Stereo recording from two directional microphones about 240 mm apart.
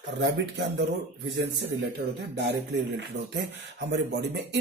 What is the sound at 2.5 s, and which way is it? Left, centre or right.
Speech, right.